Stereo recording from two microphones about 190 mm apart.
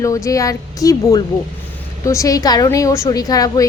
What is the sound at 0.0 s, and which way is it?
A woman's voice, 15° left (ahead or behind).